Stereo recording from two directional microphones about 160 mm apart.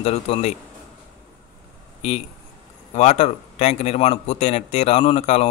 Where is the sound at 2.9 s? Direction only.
45° left (ahead or behind).